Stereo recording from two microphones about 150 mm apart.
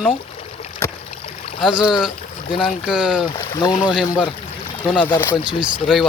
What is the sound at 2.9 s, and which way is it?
Speech, 5° right (ahead or behind).